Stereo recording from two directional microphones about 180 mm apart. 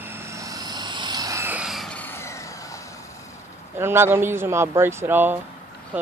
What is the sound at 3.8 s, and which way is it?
Speech, 15° right (ahead or behind).